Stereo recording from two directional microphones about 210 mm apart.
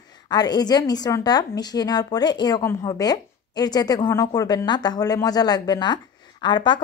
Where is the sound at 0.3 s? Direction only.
20° left (ahead or behind).